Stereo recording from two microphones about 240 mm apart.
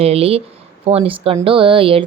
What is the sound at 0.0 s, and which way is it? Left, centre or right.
Speech, right.